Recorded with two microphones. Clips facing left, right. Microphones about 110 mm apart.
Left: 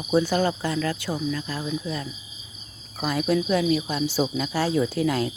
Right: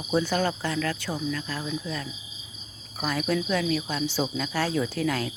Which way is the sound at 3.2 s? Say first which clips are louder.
Left 4 dB; 15° left (ahead or behind).